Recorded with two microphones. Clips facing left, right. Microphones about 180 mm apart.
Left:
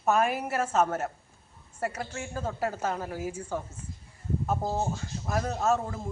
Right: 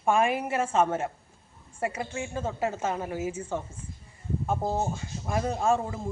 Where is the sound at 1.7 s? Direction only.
10° right (ahead or behind).